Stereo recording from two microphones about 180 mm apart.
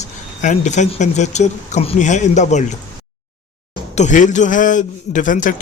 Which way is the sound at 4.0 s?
45° left (ahead or behind).